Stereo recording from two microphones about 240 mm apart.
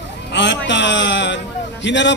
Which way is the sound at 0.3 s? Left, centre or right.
Left.